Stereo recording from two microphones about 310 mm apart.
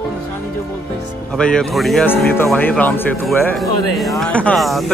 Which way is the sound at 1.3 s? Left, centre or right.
Centre.